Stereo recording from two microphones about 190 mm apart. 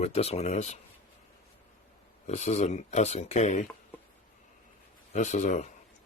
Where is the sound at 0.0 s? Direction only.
35° left (ahead or behind).